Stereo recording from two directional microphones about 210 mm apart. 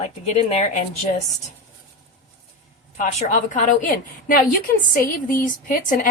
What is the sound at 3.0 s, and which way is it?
A woman's voice, 35° left (ahead or behind).